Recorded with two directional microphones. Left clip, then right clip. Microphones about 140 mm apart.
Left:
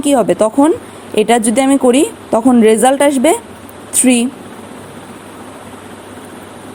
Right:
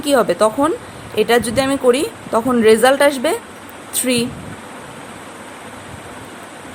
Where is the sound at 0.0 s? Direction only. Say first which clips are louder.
Left 2 dB; 25° left (ahead or behind).